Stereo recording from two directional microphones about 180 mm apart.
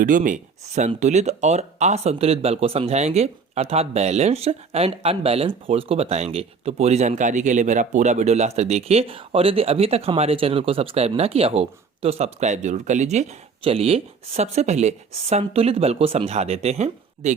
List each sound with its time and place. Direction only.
0.0 s speech: 45° right (ahead or behind)